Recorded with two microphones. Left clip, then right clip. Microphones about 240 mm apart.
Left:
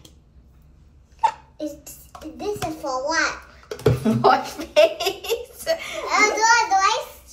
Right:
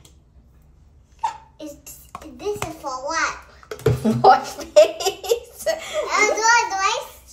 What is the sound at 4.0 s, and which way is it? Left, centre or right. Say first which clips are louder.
Baby laughter: right 5 dB; right.